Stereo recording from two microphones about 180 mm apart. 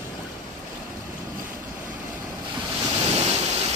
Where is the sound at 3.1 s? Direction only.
35° right (ahead or behind).